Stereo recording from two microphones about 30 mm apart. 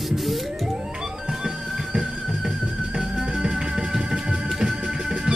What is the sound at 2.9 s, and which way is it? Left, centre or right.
Music, right.